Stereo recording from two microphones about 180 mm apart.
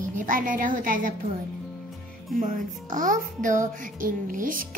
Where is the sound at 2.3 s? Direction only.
50° right (ahead or behind).